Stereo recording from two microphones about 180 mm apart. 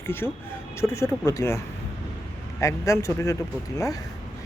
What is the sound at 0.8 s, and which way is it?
Speech, 15° left (ahead or behind).